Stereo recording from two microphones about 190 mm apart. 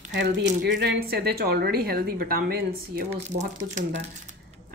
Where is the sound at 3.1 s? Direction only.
35° right (ahead or behind).